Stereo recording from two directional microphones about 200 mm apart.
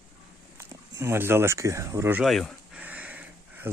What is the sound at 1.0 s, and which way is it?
Speech, 10° right (ahead or behind).